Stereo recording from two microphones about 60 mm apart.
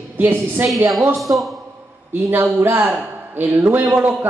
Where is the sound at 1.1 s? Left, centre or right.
Centre.